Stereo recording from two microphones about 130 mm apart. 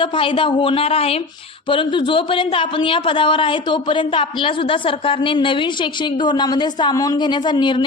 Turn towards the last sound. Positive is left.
turn(degrees=35)  # may be behind; listen again after turning